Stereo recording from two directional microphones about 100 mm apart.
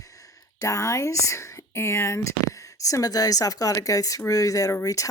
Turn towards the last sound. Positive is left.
turn(degrees=35)  # may be behind; listen again after turning